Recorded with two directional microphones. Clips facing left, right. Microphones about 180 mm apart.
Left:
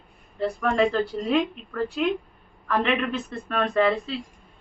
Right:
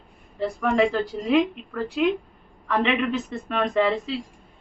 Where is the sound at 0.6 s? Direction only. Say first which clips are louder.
Right 1 dB; 10° right (ahead or behind).